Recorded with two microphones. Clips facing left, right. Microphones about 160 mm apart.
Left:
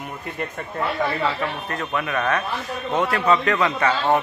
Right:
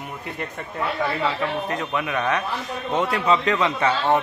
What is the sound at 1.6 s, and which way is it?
Speech, 15° right (ahead or behind).